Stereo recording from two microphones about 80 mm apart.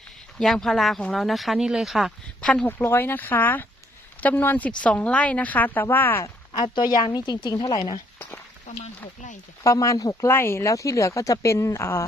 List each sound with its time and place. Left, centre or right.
0.3 s speech: centre
2.4 s speech: centre
2.6 s a woman's voice: left
6.5 s a woman's voice: left
9.6 s speech: left
10.2 s speech: left